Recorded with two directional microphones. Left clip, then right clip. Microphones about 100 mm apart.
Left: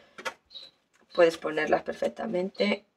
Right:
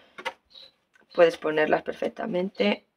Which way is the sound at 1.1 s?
45° right (ahead or behind).